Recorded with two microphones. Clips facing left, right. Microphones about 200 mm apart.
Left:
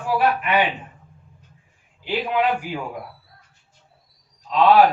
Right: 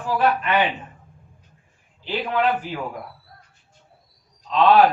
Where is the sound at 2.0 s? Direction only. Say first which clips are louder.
Left 1 dB; 10° left (ahead or behind).